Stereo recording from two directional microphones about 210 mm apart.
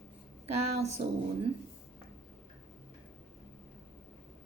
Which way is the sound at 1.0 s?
45° right (ahead or behind).